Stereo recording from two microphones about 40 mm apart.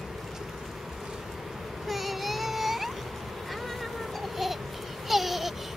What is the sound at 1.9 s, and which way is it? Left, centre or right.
Child singing, centre.